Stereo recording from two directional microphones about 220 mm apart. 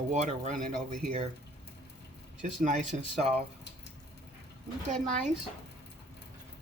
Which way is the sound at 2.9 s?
30° right (ahead or behind).